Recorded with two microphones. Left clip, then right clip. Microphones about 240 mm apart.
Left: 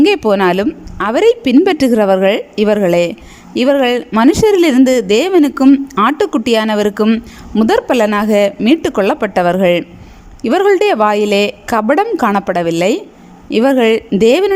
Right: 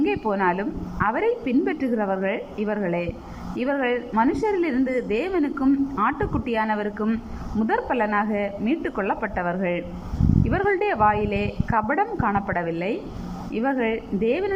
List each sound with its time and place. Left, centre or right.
0.0 s speech: left